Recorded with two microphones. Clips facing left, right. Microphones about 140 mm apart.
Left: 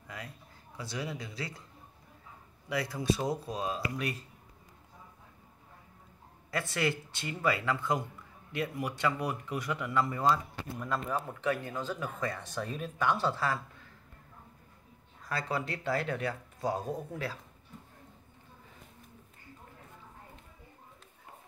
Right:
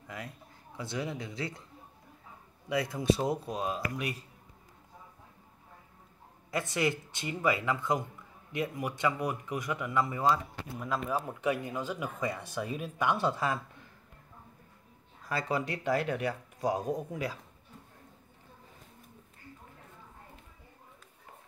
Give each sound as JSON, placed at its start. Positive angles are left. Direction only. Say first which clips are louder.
{"t": 0.7, "sound": "speech", "louder": "right 2 dB", "side_deg": -20}
{"t": 2.7, "sound": "speech", "louder": "right 3 dB", "side_deg": -20}
{"t": 6.5, "sound": "speech", "louder": "right 1 dB", "side_deg": -20}
{"t": 15.2, "sound": "speech", "louder": "right 2 dB", "side_deg": -10}